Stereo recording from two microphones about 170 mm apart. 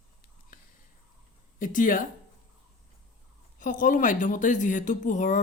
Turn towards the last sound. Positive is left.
turn(degrees=45)  # may be behind; listen again after turning